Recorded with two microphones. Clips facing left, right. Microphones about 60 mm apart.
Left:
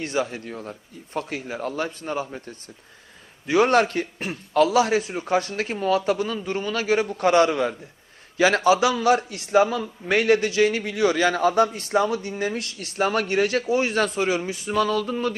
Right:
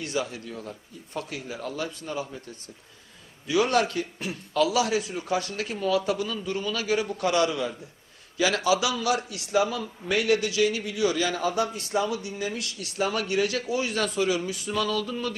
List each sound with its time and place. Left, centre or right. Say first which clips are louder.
0.0 s a man's voice: left 4 dB; left
3.4 s a man's voice: left 5 dB; left